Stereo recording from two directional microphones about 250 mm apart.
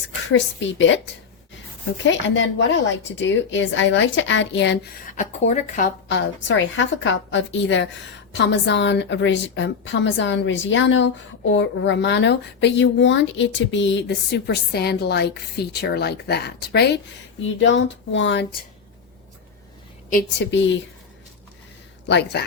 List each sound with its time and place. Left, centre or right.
0.3 s a woman's voice: left
2.0 s a woman's voice: left
5.1 s speech: left
6.1 s a woman's voice: left
20.5 s a woman's voice: left
22.0 s speech: left